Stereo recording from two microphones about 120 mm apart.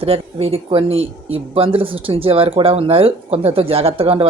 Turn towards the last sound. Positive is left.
turn(degrees=-55)  # may be behind; listen again after turning